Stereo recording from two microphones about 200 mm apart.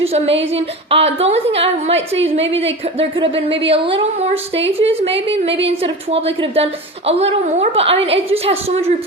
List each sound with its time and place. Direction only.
0.0 s a woman's voice: 30° right (ahead or behind)